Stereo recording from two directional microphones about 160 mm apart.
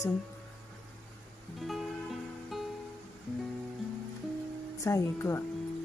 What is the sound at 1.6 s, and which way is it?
Music, centre (ahead or behind).